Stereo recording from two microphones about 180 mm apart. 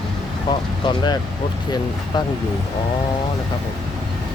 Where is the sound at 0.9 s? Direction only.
25° left (ahead or behind).